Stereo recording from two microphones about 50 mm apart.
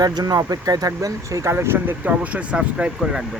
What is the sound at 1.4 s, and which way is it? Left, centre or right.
Speech, right.